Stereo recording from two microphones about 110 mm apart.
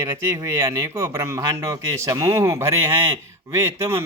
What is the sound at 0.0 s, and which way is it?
Speech, 30° right (ahead or behind).